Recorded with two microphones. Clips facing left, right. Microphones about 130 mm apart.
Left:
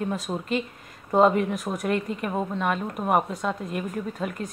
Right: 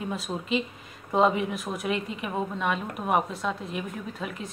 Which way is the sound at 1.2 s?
5° right (ahead or behind).